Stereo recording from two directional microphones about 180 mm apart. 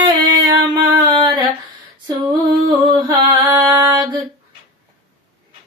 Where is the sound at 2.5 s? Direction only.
25° right (ahead or behind).